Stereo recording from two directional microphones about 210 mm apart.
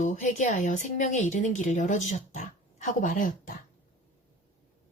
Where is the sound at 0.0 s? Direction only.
35° left (ahead or behind).